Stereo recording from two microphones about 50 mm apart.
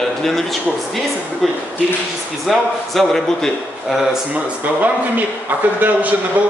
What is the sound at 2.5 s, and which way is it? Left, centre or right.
A man's voice, centre.